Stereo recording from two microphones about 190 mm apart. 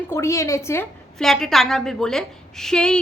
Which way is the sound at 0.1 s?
15° left (ahead or behind).